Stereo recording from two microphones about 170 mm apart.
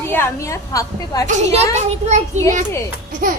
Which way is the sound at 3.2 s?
55° right (ahead or behind).